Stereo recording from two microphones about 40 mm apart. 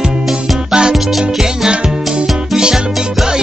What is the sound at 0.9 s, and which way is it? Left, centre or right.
Music, centre.